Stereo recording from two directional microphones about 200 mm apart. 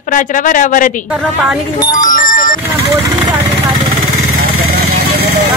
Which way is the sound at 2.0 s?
40° left (ahead or behind).